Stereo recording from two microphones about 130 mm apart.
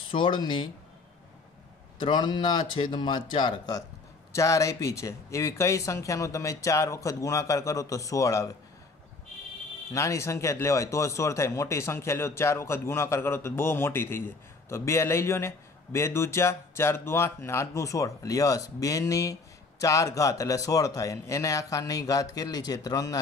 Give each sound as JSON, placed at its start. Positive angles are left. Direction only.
{"t": 0.1, "sound": "speech", "side_deg": 40}
{"t": 2.0, "sound": "speech", "side_deg": 35}
{"t": 4.3, "sound": "a man's voice", "side_deg": 25}
{"t": 9.9, "sound": "a man's voice", "side_deg": 25}